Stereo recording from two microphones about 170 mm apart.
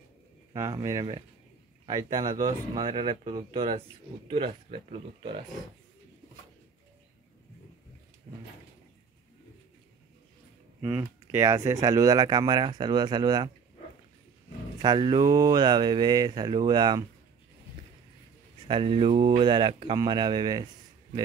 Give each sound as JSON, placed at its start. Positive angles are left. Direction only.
{"t": 0.6, "sound": "speech", "side_deg": -20}
{"t": 10.8, "sound": "speech", "side_deg": -15}
{"t": 14.8, "sound": "speech", "side_deg": -25}
{"t": 18.7, "sound": "speech", "side_deg": -30}